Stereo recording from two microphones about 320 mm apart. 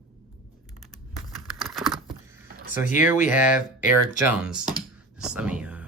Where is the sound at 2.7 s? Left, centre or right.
Left.